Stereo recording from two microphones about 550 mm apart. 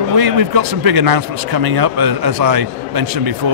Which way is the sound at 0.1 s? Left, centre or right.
Right.